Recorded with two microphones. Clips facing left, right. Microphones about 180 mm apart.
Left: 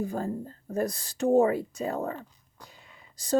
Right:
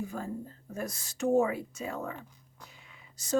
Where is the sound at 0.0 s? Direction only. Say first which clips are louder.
Left 6 dB; 35° left (ahead or behind).